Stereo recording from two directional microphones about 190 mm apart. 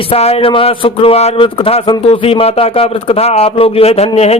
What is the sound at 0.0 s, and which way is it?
Speech, 30° left (ahead or behind).